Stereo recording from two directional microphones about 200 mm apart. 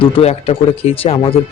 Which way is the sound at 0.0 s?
30° left (ahead or behind).